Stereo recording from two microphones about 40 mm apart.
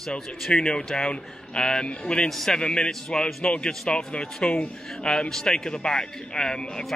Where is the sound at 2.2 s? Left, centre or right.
Centre; by 4.7 s left.